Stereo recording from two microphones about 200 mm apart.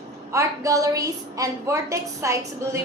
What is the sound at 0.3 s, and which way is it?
A woman's voice, 15° right (ahead or behind).